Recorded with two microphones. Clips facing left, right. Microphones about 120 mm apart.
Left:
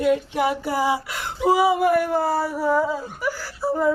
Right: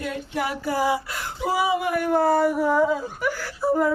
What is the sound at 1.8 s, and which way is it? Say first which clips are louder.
Speech: left 2 dB; centre (ahead or behind).